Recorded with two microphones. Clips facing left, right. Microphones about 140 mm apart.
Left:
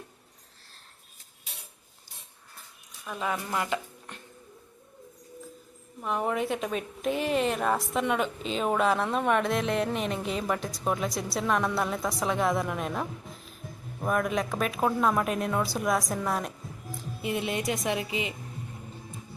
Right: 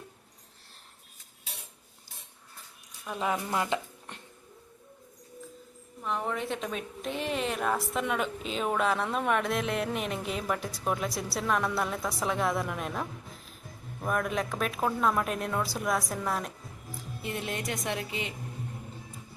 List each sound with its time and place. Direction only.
3.1 s speech: 15° right (ahead or behind)
6.1 s a woman's voice: 10° left (ahead or behind)